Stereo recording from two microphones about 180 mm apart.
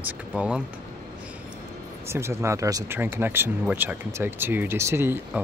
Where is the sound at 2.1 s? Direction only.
15° right (ahead or behind).